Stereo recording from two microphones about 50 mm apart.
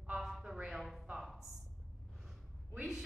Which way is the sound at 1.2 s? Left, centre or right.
Centre.